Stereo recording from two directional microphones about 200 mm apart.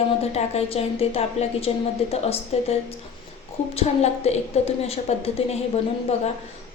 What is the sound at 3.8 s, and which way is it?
A woman's voice, 35° left (ahead or behind).